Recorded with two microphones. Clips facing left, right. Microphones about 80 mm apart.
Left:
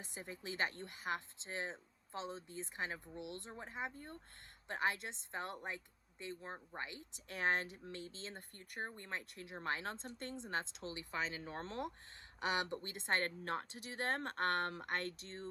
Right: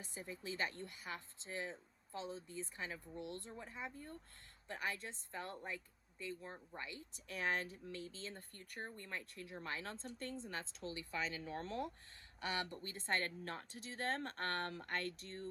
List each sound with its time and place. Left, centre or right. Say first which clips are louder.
0.0 s speech: even; left
3.2 s speech: right 2 dB; right
3.4 s speech: left 3 dB; left
3.9 s speech: even; left
4.7 s speech: left 5 dB; left
12.4 s speech: left 4 dB; left
13.4 s speech: left 6 dB; left
13.7 s speech: left 2 dB; left